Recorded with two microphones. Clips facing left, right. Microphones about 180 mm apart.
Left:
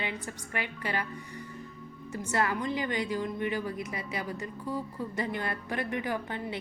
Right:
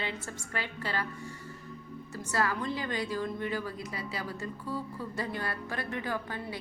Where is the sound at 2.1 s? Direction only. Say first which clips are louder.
Left 2 dB; 20° left (ahead or behind).